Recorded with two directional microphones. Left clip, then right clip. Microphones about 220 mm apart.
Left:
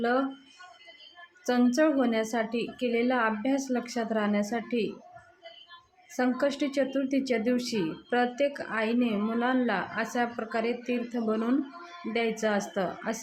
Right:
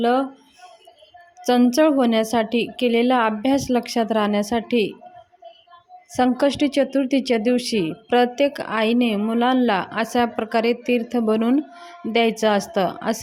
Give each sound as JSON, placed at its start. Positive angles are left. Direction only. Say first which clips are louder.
{"t": 0.0, "sound": "speech", "louder": "right 8 dB", "side_deg": -30}
{"t": 1.5, "sound": "speech", "louder": "right 8 dB", "side_deg": -35}
{"t": 6.1, "sound": "speech", "louder": "right 9 dB", "side_deg": -35}